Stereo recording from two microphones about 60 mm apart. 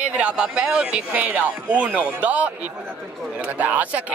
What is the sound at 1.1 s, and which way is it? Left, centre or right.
Speech, right.